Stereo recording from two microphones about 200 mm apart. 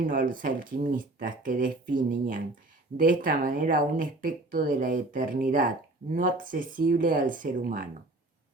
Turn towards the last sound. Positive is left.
turn(degrees=-45)  # may be behind; listen again after turning